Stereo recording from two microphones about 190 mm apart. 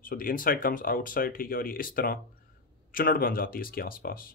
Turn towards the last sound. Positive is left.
turn(degrees=50)  # may be behind; listen again after turning